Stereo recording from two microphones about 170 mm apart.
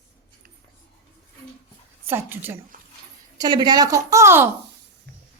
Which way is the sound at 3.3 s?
25° right (ahead or behind).